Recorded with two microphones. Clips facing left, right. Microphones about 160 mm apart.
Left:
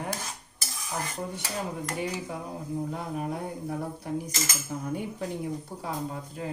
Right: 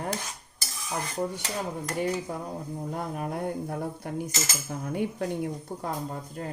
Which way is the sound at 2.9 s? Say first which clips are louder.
Even; 55° right (ahead or behind).